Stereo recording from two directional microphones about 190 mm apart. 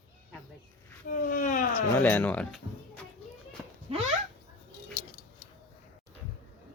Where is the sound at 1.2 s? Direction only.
45° left (ahead or behind).